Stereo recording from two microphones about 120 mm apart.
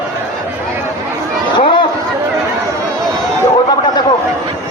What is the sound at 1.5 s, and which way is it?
Chatter, 45° left (ahead or behind).